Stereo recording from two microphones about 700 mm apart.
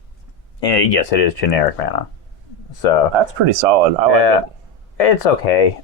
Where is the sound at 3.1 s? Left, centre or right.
Right.